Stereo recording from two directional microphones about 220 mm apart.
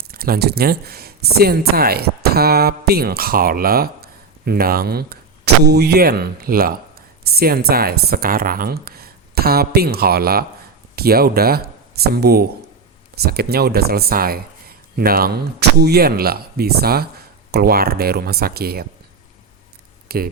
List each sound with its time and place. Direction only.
0.0 s speech: 45° right (ahead or behind)
20.1 s speech: 45° right (ahead or behind)